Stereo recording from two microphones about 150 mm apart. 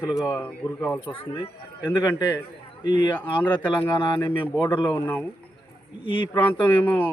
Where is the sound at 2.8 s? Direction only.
30° left (ahead or behind).